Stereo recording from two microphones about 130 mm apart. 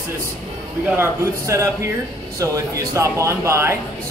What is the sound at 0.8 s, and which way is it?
Speech, 20° right (ahead or behind).